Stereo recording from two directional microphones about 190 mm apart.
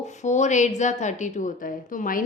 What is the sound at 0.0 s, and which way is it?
Speech, 40° left (ahead or behind).